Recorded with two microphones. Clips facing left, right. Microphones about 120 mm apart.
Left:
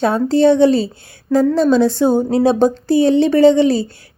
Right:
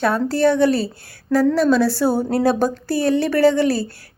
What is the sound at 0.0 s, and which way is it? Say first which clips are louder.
A woman's voice: left 4 dB; 20° left (ahead or behind).